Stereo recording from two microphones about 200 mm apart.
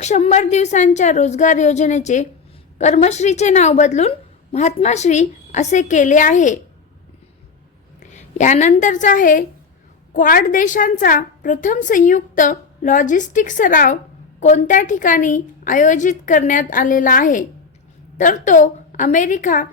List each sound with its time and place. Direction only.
0.0 s a woman's voice: 35° left (ahead or behind)
7.9 s a woman's voice: 35° left (ahead or behind)